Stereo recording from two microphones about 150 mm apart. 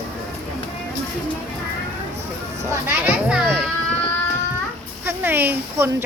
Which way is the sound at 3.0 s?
10° right (ahead or behind).